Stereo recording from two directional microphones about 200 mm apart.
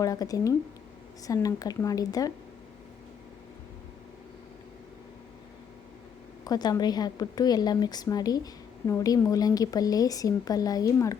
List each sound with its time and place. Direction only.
0.0 s speech: 15° left (ahead or behind)
6.4 s a woman's voice: 20° left (ahead or behind)